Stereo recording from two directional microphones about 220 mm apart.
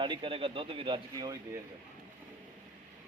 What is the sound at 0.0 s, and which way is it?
A man's voice, 20° right (ahead or behind).